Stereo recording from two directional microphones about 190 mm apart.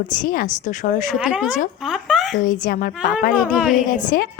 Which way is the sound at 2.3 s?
45° left (ahead or behind).